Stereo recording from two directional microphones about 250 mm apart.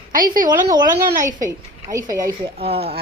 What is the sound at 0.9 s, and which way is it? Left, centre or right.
A woman's voice, centre.